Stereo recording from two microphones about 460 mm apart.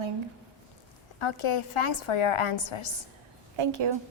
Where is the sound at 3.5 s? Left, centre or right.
Right.